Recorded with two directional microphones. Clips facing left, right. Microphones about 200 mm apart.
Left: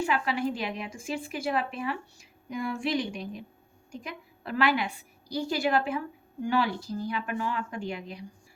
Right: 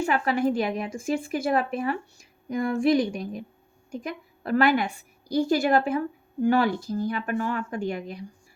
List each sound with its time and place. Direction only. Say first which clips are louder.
0.0 s a woman's voice: right 4 dB; 50° right (ahead or behind)